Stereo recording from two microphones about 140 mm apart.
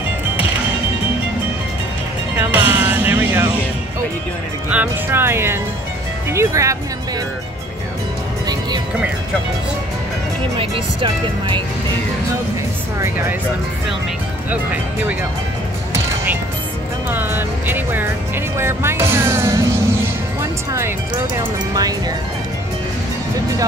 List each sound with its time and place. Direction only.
2.3 s music: 15° right (ahead or behind)
4.6 s speech: 15° right (ahead or behind)
10.6 s speech: 40° right (ahead or behind)
17.1 s music: 15° right (ahead or behind)
18.6 s speech: 20° right (ahead or behind)
21.7 s speech: 25° right (ahead or behind)